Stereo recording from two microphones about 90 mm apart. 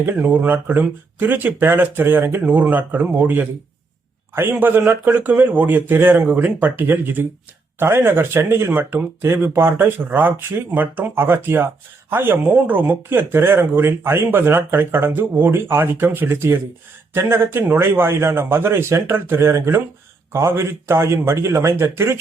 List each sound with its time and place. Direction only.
0.0 s speech: 20° right (ahead or behind)
4.5 s speech: 15° right (ahead or behind)